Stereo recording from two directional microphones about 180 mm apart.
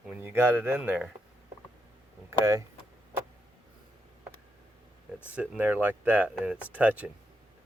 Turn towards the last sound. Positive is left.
turn(degrees=-10)  # may be behind; listen again after turning